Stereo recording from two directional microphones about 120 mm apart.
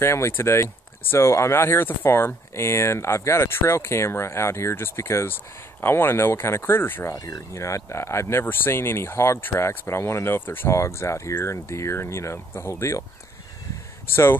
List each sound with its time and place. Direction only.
0.0 s speech: 20° left (ahead or behind)
14.0 s speech: 20° left (ahead or behind)